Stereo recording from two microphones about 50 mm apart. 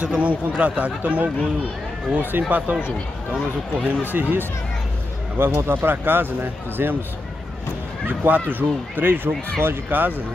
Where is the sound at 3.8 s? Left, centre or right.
Right.